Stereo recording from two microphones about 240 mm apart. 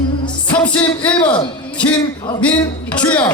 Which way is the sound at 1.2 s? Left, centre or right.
Centre.